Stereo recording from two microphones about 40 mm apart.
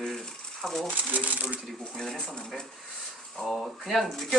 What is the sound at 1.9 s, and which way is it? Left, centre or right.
Speech, centre.